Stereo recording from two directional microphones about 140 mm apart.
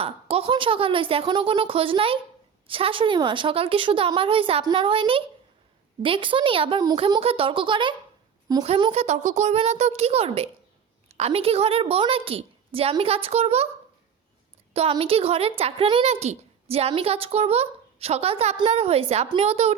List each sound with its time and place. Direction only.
0.0 s a woman's voice: 45° right (ahead or behind); by 8.6 s 25° right (ahead or behind)
8.9 s speech: 50° right (ahead or behind)
14.7 s speech: 45° right (ahead or behind)